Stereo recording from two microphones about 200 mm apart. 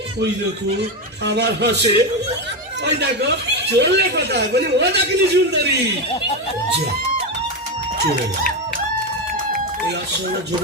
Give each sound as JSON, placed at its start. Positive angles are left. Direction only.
{"t": 1.2, "sound": "speech", "side_deg": -55}